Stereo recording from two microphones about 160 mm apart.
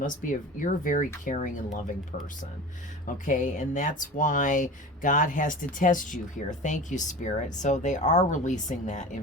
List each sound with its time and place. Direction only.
0.0 s speech: 55° left (ahead or behind)
3.2 s speech: 50° left (ahead or behind)